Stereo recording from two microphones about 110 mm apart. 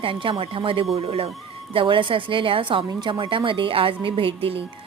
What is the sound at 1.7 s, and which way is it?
A woman's voice, 50° right (ahead or behind).